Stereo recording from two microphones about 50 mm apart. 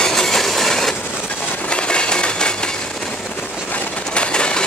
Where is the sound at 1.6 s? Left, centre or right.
Left.